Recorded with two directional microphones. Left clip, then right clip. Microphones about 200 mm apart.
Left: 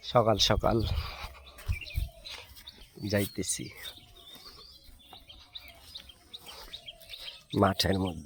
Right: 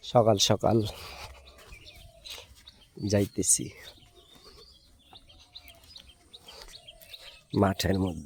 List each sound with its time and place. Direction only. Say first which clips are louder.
0.0 s speech: right 2 dB; 45° right (ahead or behind)
2.2 s chicken: right 2 dB; 55° right (ahead or behind)
3.0 s speech: right 3 dB; 50° right (ahead or behind)
6.5 s chirp: right 1 dB; 45° right (ahead or behind)
6.8 s bird: left 4 dB; 25° right (ahead or behind)
7.6 s speech: even; 30° right (ahead or behind)